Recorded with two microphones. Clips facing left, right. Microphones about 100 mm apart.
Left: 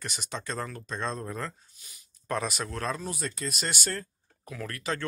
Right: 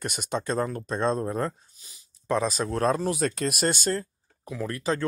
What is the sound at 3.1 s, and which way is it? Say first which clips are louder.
Speech: right 9 dB; 80° right.